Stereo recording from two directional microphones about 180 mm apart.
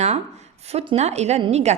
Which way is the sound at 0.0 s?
40° right (ahead or behind).